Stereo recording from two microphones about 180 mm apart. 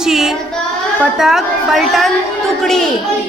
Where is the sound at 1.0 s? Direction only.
Centre (ahead or behind).